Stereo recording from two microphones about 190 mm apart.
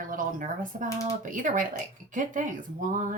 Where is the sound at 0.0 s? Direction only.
45° right (ahead or behind).